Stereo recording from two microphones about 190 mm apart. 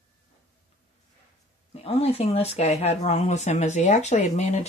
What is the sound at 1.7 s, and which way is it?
Speech, 35° left (ahead or behind).